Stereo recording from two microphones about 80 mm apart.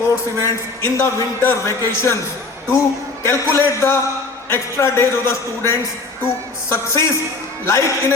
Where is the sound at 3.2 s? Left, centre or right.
Left.